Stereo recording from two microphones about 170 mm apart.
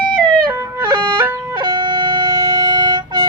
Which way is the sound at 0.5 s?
15° right (ahead or behind).